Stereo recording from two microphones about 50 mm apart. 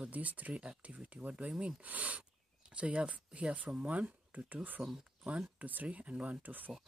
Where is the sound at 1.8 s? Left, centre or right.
Right.